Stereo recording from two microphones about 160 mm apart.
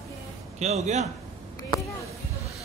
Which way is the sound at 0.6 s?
45° right (ahead or behind).